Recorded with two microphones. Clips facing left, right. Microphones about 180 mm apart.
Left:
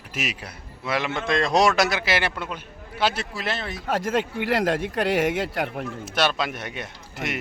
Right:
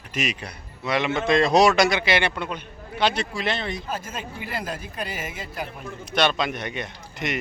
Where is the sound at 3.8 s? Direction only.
75° left (ahead or behind).